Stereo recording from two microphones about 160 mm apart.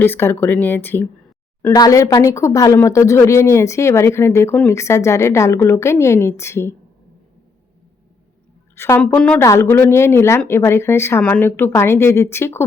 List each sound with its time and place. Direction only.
0.0 s a woman's voice: 15° left (ahead or behind)
8.7 s a woman's voice: 15° left (ahead or behind)
9.4 s a woman's voice: 15° left (ahead or behind)